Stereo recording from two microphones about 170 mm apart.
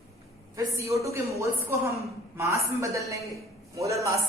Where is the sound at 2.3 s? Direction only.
15° right (ahead or behind).